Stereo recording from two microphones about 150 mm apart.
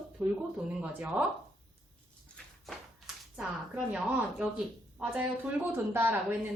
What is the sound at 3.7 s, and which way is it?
A woman's voice, 10° right (ahead or behind).